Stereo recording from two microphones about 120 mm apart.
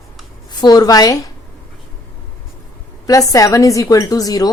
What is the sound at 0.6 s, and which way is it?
Speech, 35° left (ahead or behind).